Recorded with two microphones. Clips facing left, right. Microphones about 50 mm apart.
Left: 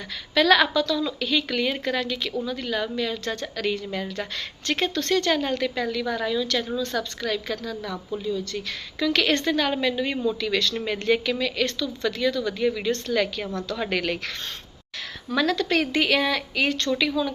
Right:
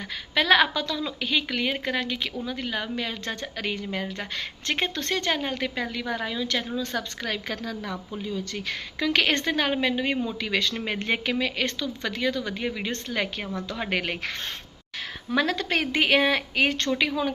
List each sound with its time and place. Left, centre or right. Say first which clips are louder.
0.3 s a woman's voice: left 2 dB; right